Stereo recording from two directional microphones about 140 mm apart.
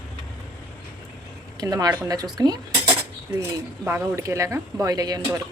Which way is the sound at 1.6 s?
25° right (ahead or behind).